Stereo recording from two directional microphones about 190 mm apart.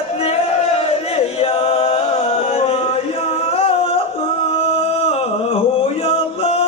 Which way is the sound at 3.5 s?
30° left (ahead or behind).